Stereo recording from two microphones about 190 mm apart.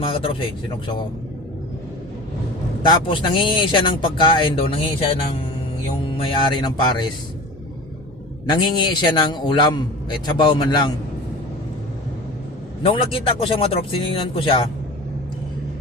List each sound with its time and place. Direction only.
0.0 s speech: 30° left (ahead or behind)
2.8 s speech: 25° left (ahead or behind)
8.4 s speech: 25° left (ahead or behind)
12.8 s speech: 30° left (ahead or behind)